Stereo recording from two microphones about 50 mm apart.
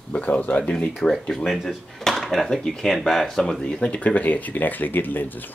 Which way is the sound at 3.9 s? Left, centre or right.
Left.